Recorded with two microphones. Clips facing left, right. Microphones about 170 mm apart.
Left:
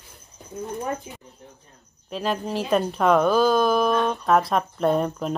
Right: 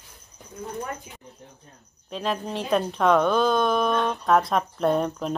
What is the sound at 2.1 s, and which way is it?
Speech, centre (ahead or behind).